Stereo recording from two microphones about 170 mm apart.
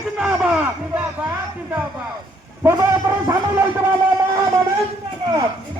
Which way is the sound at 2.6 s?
15° right (ahead or behind).